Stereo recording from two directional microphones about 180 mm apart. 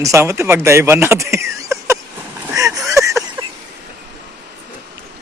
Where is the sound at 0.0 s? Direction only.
15° right (ahead or behind).